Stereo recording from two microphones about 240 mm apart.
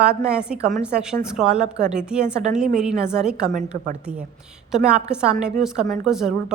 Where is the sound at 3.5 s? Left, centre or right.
Right.